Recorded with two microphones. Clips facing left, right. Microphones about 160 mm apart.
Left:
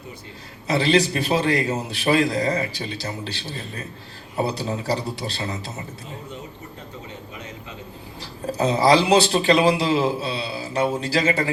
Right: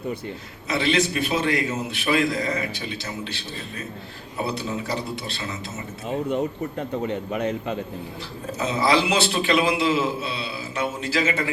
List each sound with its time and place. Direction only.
0.7 s a man's voice: 35° left (ahead or behind)
6.1 s a man's voice: 65° right (ahead or behind)
8.5 s a man's voice: 35° left (ahead or behind)